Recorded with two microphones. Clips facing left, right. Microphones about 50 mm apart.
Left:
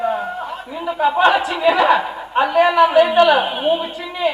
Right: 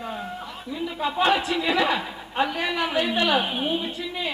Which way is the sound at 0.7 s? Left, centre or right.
Left.